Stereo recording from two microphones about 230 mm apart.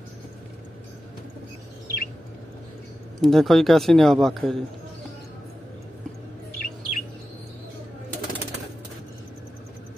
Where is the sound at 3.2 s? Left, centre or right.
Centre.